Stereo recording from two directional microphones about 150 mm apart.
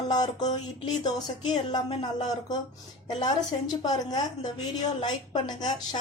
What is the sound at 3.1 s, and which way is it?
Speech, 30° left (ahead or behind).